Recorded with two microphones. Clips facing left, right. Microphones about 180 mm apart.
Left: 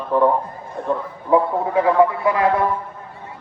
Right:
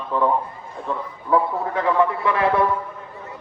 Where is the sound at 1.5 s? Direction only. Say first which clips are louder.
Left 5 dB; 30° left (ahead or behind).